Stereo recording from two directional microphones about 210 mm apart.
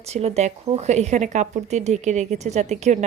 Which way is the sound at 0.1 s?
30° right (ahead or behind).